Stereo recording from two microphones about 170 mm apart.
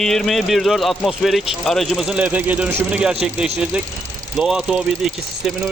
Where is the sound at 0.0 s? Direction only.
5° left (ahead or behind).